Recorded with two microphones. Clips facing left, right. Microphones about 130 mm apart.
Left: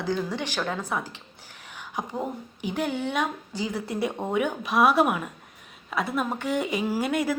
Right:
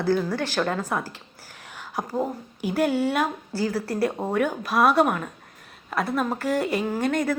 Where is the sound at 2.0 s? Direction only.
5° right (ahead or behind).